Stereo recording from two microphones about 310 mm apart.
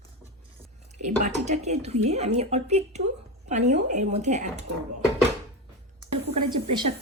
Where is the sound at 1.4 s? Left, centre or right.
Right.